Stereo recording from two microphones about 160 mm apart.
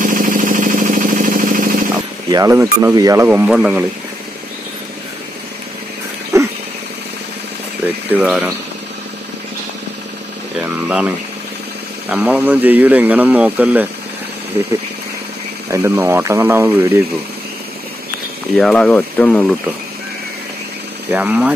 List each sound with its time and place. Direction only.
0.0 s a sound: 60° right (ahead or behind)
2.3 s a man's voice: 20° right (ahead or behind)
6.3 s dog: 15° right (ahead or behind)
7.8 s a man's voice: 10° right (ahead or behind)
10.6 s a man's voice: 10° right (ahead or behind)
15.7 s a man's voice: 15° right (ahead or behind)
18.6 s speech: 5° left (ahead or behind)
21.1 s a man's voice: 10° right (ahead or behind)